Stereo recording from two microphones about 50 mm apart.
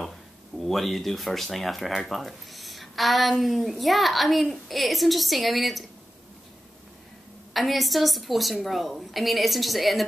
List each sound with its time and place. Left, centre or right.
0.6 s speech: centre
7.5 s speech: centre